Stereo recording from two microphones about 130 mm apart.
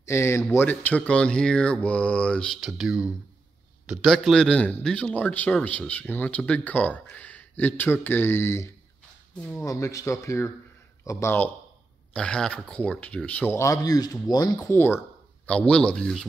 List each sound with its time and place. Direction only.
0.0 s speech: 20° left (ahead or behind)
14.7 s speech: 15° left (ahead or behind)